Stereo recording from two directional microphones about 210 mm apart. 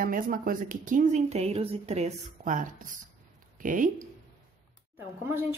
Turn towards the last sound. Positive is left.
turn(degrees=-10)  # may be behind; listen again after turning